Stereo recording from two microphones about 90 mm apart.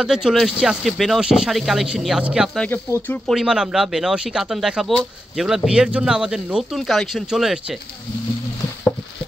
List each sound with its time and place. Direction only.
0.0 s speech: 5° right (ahead or behind)
2.7 s speech: 20° left (ahead or behind)
3.3 s speech: 5° right (ahead or behind)